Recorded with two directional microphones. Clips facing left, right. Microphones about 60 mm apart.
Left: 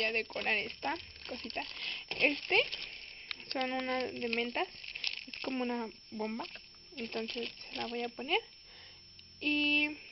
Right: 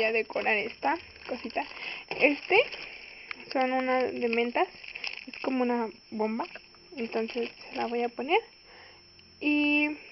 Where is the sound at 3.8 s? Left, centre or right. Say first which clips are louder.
Right 8 dB; right.